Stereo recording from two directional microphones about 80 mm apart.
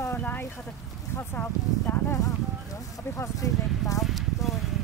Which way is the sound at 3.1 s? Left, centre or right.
Left.